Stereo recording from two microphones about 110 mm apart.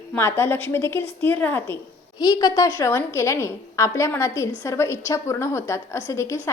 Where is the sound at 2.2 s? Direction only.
35° left (ahead or behind).